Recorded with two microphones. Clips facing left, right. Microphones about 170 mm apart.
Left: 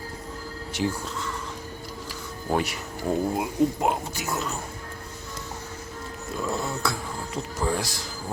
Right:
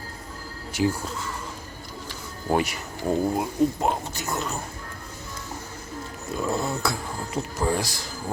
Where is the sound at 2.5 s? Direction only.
5° right (ahead or behind).